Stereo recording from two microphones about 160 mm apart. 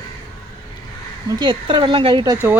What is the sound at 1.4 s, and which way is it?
Speech, 30° right (ahead or behind).